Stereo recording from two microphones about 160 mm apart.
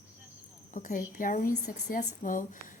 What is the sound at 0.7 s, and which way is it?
Speech, 50° left (ahead or behind).